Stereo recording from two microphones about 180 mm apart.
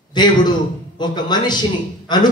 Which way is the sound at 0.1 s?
25° left (ahead or behind).